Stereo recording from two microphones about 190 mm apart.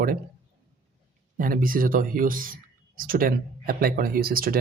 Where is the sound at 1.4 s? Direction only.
45° right (ahead or behind).